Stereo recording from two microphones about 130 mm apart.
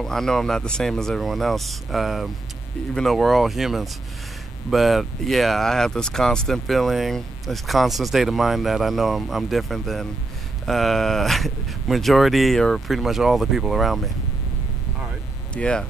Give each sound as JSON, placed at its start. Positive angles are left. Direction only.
{"t": 0.0, "sound": "speech", "side_deg": 5}
{"t": 15.5, "sound": "speech", "side_deg": 10}